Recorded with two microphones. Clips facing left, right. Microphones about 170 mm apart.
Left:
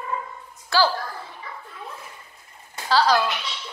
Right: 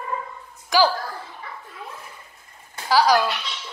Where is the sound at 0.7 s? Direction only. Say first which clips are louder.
Right 2 dB; 15° right (ahead or behind).